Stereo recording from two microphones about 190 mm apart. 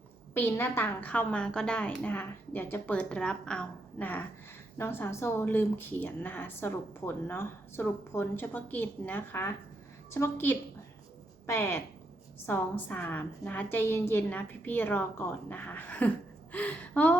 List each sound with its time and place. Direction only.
0.3 s speech: 10° left (ahead or behind)